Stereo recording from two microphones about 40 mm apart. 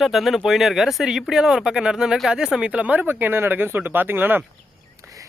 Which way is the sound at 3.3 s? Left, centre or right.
Right.